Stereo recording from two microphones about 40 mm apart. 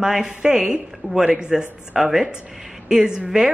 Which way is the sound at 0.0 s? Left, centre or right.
Centre.